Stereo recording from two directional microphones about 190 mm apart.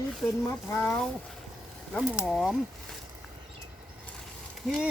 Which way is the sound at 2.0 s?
5° right (ahead or behind).